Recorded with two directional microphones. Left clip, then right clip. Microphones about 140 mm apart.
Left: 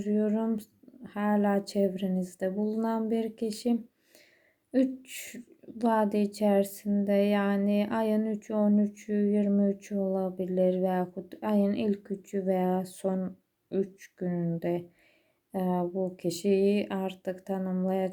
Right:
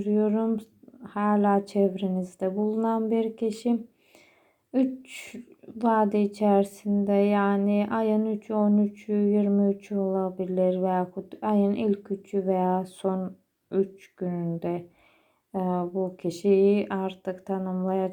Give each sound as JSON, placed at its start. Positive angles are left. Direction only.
{"t": 0.0, "sound": "a woman's voice", "side_deg": 15}